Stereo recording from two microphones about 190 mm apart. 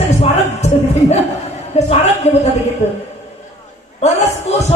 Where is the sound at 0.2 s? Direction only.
35° left (ahead or behind).